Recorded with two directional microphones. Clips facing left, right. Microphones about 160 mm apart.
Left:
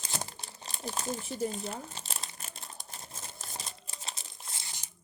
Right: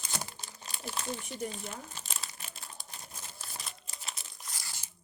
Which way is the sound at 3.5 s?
30° left (ahead or behind).